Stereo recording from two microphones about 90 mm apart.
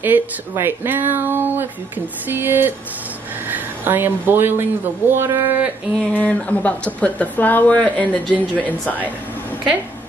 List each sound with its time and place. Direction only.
0.0 s speech: 25° right (ahead or behind)
6.1 s speech: 15° left (ahead or behind)